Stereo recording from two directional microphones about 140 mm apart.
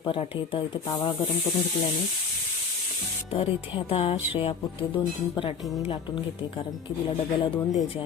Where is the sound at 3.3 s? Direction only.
45° left (ahead or behind).